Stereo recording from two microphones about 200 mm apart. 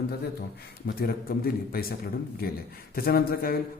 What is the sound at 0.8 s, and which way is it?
A man's voice, 50° left (ahead or behind).